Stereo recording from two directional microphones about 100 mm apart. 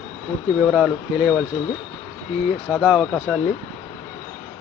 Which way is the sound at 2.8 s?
Centre (ahead or behind).